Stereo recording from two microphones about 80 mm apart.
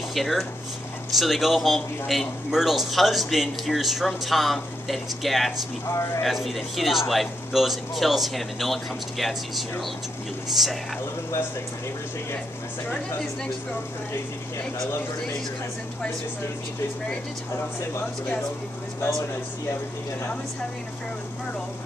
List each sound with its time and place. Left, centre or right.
0.1 s speech: centre
5.9 s speech: left
6.2 s speech: centre
18.9 s speech: left